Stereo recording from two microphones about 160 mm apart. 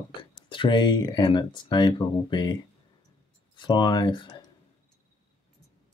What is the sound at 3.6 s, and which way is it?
Speech, 30° left (ahead or behind).